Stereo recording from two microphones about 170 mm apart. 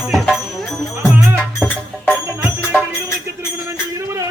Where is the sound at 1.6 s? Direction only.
10° left (ahead or behind).